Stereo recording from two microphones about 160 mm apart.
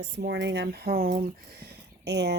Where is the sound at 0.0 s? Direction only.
90° right.